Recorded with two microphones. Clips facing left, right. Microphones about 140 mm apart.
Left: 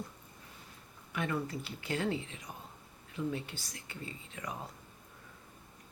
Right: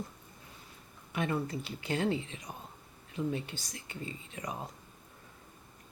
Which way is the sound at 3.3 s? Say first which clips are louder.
Right 2 dB; 20° right (ahead or behind).